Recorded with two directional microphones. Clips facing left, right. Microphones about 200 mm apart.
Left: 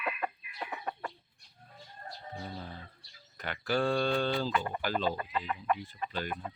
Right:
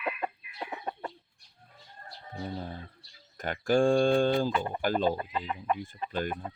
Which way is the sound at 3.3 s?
45° right (ahead or behind).